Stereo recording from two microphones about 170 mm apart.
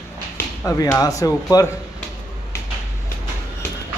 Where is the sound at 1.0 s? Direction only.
20° left (ahead or behind).